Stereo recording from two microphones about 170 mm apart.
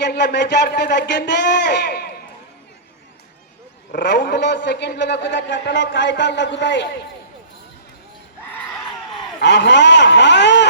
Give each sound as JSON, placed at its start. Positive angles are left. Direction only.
{"t": 0.0, "sound": "speech", "side_deg": 75}
{"t": 3.9, "sound": "a man's voice", "side_deg": 85}
{"t": 9.4, "sound": "a man's voice", "side_deg": 90}